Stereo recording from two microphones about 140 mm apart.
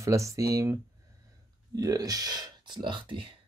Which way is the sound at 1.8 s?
25° right (ahead or behind).